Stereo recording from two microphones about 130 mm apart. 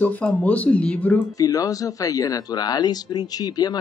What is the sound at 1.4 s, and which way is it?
Speech, 25° left (ahead or behind).